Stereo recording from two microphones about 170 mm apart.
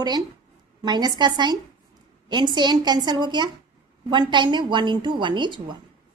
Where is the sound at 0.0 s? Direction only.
25° right (ahead or behind).